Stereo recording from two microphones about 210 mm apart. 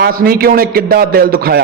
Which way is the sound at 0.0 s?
45° right (ahead or behind).